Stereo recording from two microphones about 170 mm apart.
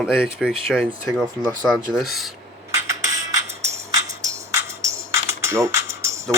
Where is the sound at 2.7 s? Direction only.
20° right (ahead or behind).